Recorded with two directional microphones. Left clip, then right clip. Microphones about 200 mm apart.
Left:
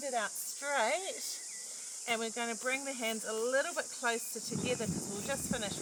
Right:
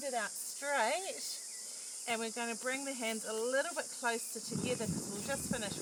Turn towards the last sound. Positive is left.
turn(degrees=15)  # may be behind; listen again after turning